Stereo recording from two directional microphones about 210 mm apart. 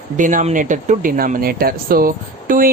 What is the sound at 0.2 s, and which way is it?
Speech, 40° right (ahead or behind).